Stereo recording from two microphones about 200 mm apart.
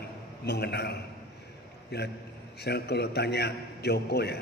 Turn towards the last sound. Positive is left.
turn(degrees=55)  # may be behind; listen again after turning